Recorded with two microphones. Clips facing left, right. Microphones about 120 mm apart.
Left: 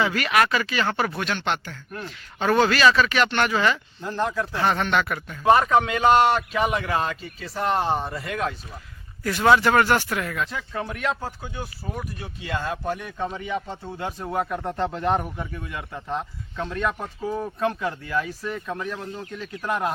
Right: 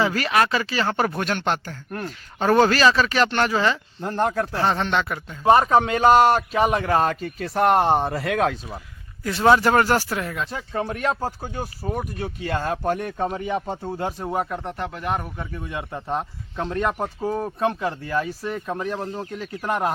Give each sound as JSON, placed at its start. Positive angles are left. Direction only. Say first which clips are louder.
{"t": 0.0, "sound": "speech", "louder": "right 1 dB", "side_deg": -35}
{"t": 4.0, "sound": "a man's voice", "louder": "right 3 dB", "side_deg": -50}
{"t": 4.5, "sound": "speech", "louder": "even", "side_deg": -30}
{"t": 5.5, "sound": "a man's voice", "louder": "right 2 dB", "side_deg": -35}
{"t": 9.2, "sound": "a man's voice", "louder": "right 1 dB", "side_deg": -30}
{"t": 14.2, "sound": "speech", "louder": "left 1 dB", "side_deg": -10}
{"t": 14.8, "sound": "speech", "louder": "left 5 dB", "side_deg": 25}
{"t": 15.6, "sound": "speech", "louder": "right 3 dB", "side_deg": -25}